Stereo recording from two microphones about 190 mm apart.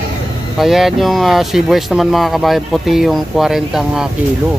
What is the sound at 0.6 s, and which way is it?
Speech, centre (ahead or behind).